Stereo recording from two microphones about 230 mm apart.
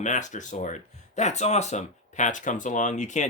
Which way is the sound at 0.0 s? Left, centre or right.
Left.